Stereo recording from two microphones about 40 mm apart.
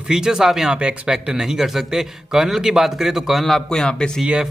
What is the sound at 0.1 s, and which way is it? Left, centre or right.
Speech, centre.